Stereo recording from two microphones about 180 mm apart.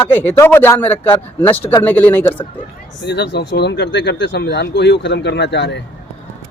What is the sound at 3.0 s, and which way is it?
Speech, 75° left (ahead or behind).